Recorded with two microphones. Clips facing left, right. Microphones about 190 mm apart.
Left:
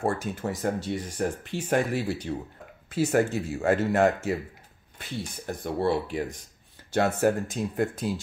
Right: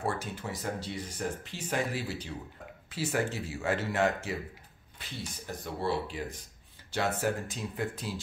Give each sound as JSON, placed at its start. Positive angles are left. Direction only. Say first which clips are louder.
{"t": 0.0, "sound": "speech", "louder": "left 6 dB", "side_deg": 50}
{"t": 5.8, "sound": "speech", "louder": "left 6 dB", "side_deg": 55}